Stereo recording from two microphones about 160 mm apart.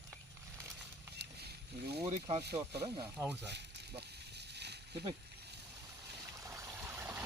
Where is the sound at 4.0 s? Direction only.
90° right.